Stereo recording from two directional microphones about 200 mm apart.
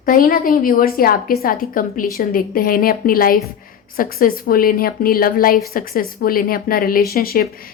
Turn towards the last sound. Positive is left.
turn(degrees=50)  # may be behind; listen again after turning